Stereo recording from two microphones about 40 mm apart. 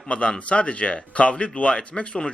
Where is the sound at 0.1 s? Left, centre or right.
Left.